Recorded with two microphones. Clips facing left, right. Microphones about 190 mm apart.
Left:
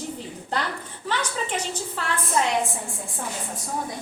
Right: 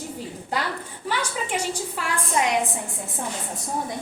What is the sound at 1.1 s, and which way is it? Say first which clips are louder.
A woman's voice: even; 10° right (ahead or behind).